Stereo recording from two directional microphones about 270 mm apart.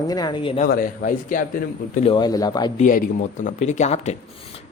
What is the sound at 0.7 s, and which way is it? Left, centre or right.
Speech, left.